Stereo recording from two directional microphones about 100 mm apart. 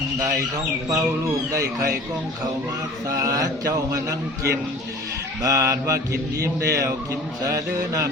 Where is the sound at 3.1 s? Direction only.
35° right (ahead or behind).